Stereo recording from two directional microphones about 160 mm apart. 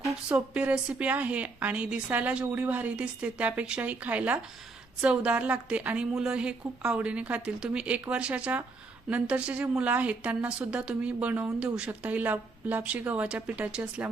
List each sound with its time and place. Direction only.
0.3 s a woman's voice: 5° right (ahead or behind)